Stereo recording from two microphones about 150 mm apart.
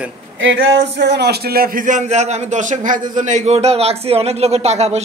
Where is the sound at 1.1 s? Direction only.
90° right.